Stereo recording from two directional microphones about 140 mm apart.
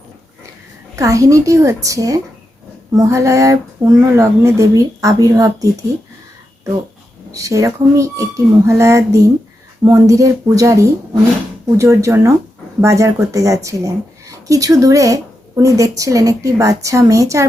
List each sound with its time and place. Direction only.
0.9 s speech: 25° right (ahead or behind)
7.3 s speech: 25° right (ahead or behind)